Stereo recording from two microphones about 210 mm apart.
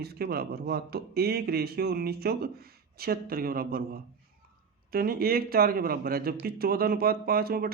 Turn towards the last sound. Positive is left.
turn(degrees=-45)  # may be behind; listen again after turning